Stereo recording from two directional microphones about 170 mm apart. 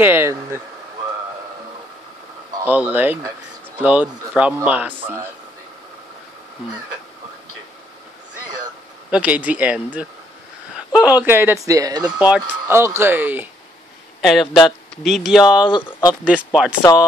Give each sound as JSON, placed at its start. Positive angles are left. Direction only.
{"t": 0.0, "sound": "speech", "side_deg": -15}
{"t": 2.5, "sound": "speech", "side_deg": -10}
{"t": 9.1, "sound": "speech", "side_deg": -10}
{"t": 10.9, "sound": "speech", "side_deg": -5}
{"t": 12.2, "sound": "speech", "side_deg": -10}
{"t": 14.2, "sound": "speech", "side_deg": 0}
{"t": 15.7, "sound": "speech", "side_deg": 25}
{"t": 16.3, "sound": "speech", "side_deg": -5}